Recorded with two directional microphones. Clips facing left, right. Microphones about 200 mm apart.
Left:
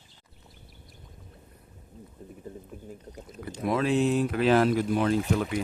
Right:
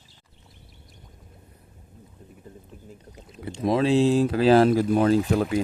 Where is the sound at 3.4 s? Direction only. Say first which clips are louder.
Right 5 dB; 30° right (ahead or behind).